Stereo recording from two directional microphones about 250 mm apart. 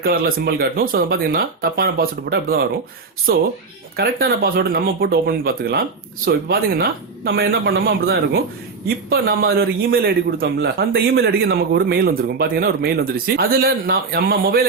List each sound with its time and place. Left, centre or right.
0.0 s speech: right
3.9 s speech: right